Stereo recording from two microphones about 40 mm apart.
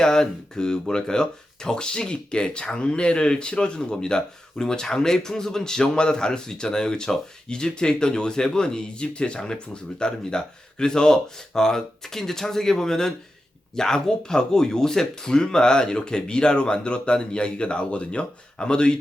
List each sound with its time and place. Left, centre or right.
0.0 s speech: centre